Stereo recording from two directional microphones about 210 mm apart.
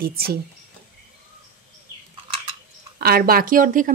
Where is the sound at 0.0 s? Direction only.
45° right (ahead or behind).